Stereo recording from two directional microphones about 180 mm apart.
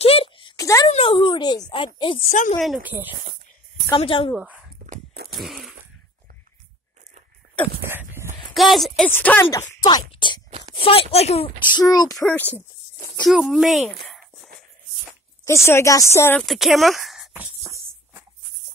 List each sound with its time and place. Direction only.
0.0 s a sound: 30° left (ahead or behind)
0.8 s a sound: 30° left (ahead or behind)
2.0 s speech: 30° left (ahead or behind)
2.6 s speech: 5° right (ahead or behind)
3.9 s speech: 30° left (ahead or behind)
4.4 s speech: 10° right (ahead or behind)
5.3 s fart: centre (ahead or behind)
7.8 s a sound: 10° right (ahead or behind)
8.5 s speech: centre (ahead or behind)
9.8 s speech: 25° left (ahead or behind)
13.2 s speech: 5° right (ahead or behind)
15.4 s speech: 15° left (ahead or behind)
16.3 s a sound: centre (ahead or behind); by 18.2 s 15° right (ahead or behind)